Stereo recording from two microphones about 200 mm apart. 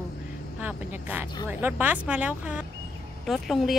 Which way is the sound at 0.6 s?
10° right (ahead or behind).